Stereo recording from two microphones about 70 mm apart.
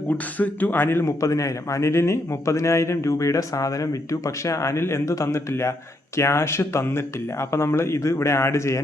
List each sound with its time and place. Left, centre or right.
0.3 s speech: left
1.0 s speech: left